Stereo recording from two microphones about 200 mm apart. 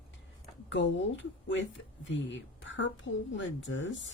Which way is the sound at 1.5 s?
65° left (ahead or behind).